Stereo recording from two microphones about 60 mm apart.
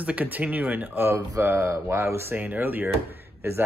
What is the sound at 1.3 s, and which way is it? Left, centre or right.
Speech, right.